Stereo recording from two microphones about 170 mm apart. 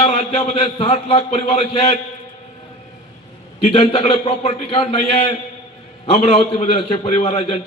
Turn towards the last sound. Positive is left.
turn(degrees=35)  # may be behind; listen again after turning